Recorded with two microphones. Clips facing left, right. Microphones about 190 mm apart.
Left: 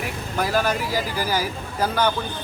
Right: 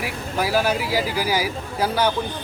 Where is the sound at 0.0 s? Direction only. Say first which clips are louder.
Right 1 dB; 10° right (ahead or behind).